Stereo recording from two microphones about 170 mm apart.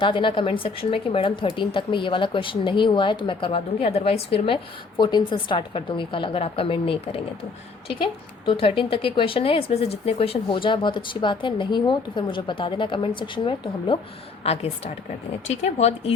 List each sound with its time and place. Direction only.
0.0 s speech: 30° left (ahead or behind)